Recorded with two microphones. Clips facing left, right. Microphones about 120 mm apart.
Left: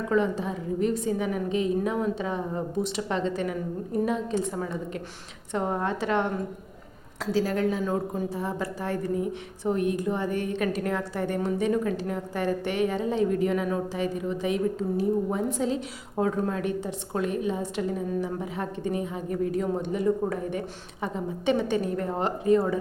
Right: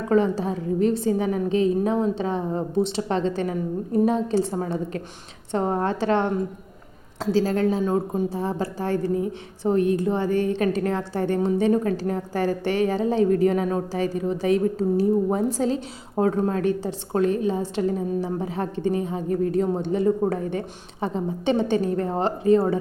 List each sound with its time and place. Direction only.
0.1 s a woman's voice: 35° right (ahead or behind)